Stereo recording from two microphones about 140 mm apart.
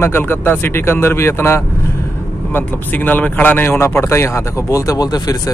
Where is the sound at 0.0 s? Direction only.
15° left (ahead or behind).